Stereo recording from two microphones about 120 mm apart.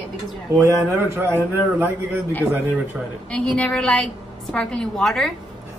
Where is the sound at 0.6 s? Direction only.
25° right (ahead or behind).